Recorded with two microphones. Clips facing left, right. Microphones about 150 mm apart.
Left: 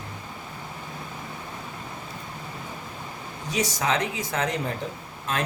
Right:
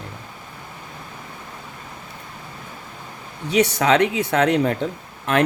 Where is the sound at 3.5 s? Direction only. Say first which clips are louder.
Right 9 dB; 65° right (ahead or behind).